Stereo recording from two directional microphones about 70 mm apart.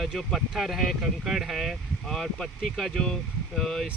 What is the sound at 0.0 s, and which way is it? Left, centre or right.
Speech, centre.